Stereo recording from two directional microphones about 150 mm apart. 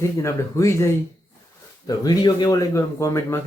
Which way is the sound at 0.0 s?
20° left (ahead or behind).